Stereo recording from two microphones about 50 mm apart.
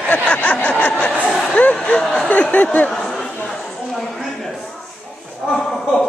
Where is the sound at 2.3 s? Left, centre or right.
Left.